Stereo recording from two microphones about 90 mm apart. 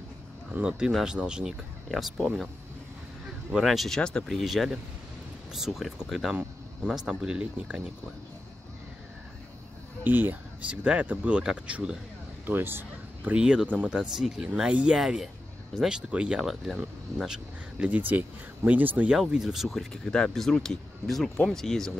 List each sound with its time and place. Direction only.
0.5 s speech: 10° right (ahead or behind)
3.5 s speech: centre (ahead or behind)
10.0 s speech: 20° right (ahead or behind)
12.4 s speech: 25° right (ahead or behind)
19.1 s speech: 5° right (ahead or behind)